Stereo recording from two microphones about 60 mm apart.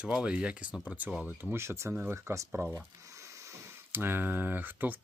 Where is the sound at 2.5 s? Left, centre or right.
Right.